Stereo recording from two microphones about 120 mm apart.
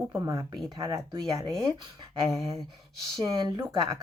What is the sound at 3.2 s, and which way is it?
Speech, 35° right (ahead or behind).